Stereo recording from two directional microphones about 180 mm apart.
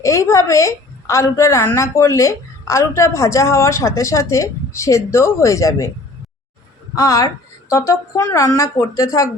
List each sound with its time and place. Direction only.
0.0 s a woman's voice: 20° left (ahead or behind)
6.9 s a woman's voice: 20° left (ahead or behind)